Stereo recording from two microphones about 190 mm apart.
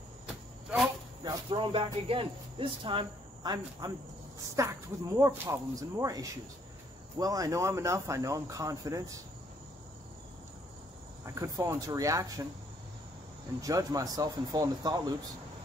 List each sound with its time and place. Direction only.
1.2 s speech: 25° right (ahead or behind)
11.2 s speech: 15° right (ahead or behind)
13.6 s speech: 20° right (ahead or behind)